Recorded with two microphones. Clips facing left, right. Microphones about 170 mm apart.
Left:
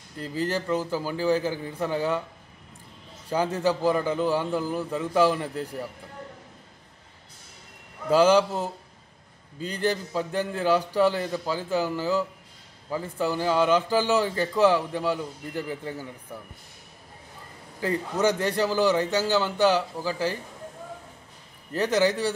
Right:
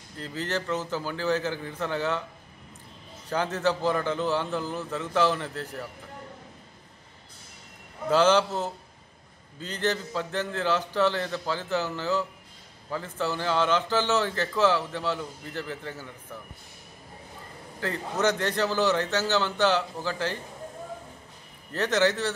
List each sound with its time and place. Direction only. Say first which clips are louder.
0.2 s a man's voice: left 3 dB; 10° left (ahead or behind)
3.3 s a man's voice: left 2 dB; 10° left (ahead or behind)
8.1 s a man's voice: left 2 dB; 10° left (ahead or behind)
17.7 s a man's voice: left 3 dB; 10° left (ahead or behind)
21.7 s a man's voice: left 2 dB; 10° left (ahead or behind)